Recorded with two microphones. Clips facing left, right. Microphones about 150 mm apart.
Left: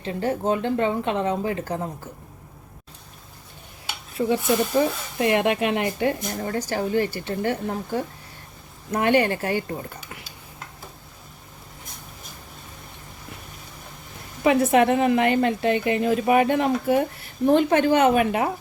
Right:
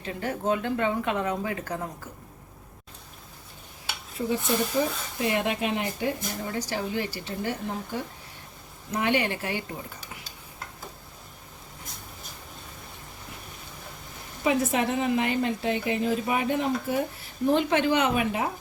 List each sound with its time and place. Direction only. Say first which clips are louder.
0.0 s a woman's voice: left 5 dB; 30° left (ahead or behind)
4.2 s speech: left 6 dB; 90° left
4.8 s a woman's voice: left 5 dB; 65° left (ahead or behind)
8.9 s speech: left 6 dB; 50° left (ahead or behind)
14.4 s a woman's voice: left 7 dB; 65° left (ahead or behind)
17.4 s speech: left 5 dB; 55° left (ahead or behind)